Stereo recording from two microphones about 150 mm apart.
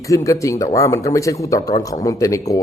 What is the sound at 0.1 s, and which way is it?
Speech, 20° left (ahead or behind).